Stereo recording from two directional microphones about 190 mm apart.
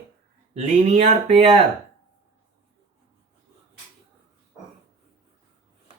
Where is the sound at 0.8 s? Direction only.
35° right (ahead or behind).